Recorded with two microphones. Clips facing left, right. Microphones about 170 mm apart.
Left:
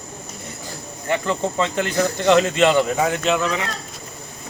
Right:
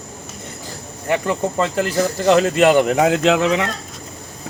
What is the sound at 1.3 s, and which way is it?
Speech, 5° right (ahead or behind).